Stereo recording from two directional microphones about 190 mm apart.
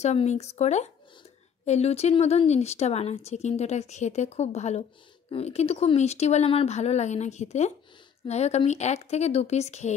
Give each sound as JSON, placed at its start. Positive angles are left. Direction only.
{"t": 0.0, "sound": "speech", "side_deg": 35}